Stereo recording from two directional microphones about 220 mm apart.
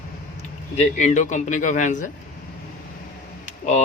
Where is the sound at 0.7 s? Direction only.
30° left (ahead or behind).